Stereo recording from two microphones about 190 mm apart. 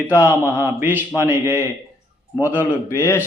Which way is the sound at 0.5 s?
10° right (ahead or behind).